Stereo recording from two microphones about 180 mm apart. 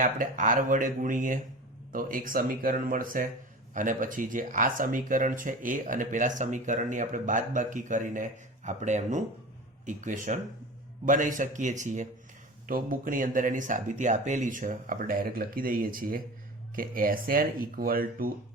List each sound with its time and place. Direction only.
0.0 s speech: 45° right (ahead or behind)